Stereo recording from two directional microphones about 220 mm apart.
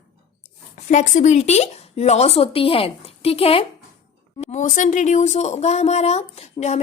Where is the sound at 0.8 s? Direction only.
35° left (ahead or behind).